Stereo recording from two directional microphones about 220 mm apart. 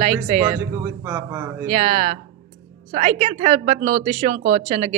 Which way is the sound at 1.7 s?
30° right (ahead or behind).